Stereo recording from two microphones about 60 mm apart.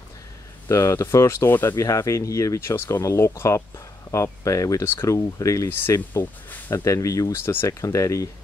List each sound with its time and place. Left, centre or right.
0.7 s speech: left
1.5 s speech: left
1.8 s speech: left
2.6 s speech: left
4.1 s speech: left
5.7 s speech: left